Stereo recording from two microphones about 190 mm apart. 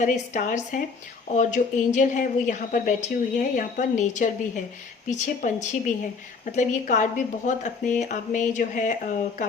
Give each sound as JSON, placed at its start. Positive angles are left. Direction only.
{"t": 0.0, "sound": "a woman's voice", "side_deg": 40}